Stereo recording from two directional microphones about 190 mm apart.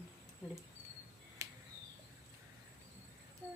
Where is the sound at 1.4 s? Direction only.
15° right (ahead or behind).